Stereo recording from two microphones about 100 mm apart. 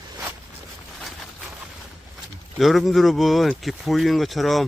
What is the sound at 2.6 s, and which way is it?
Speech, centre (ahead or behind).